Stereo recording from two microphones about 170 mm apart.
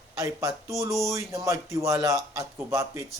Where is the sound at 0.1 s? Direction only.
20° right (ahead or behind).